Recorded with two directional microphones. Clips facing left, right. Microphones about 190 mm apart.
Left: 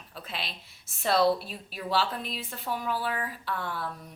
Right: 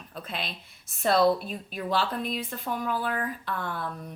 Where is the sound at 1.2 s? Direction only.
50° right (ahead or behind).